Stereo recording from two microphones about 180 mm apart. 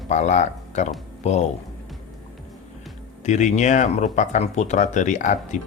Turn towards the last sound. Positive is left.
turn(degrees=45)  # may be behind; listen again after turning